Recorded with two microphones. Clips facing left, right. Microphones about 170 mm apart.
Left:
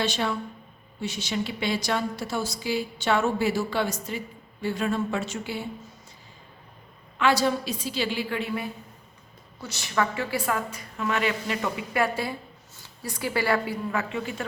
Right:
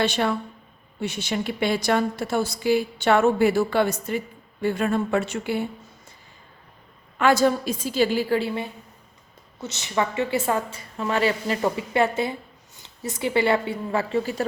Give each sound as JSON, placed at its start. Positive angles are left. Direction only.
{"t": 0.0, "sound": "a woman's voice", "side_deg": -55}
{"t": 7.2, "sound": "a woman's voice", "side_deg": -45}
{"t": 12.0, "sound": "a woman's voice", "side_deg": -20}